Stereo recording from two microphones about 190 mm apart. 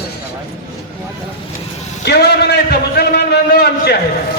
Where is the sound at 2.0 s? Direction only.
60° left (ahead or behind).